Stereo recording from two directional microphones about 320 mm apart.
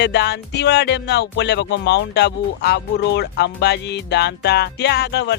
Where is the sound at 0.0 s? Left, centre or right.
Left.